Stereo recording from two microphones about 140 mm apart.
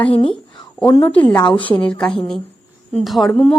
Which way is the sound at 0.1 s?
40° left (ahead or behind).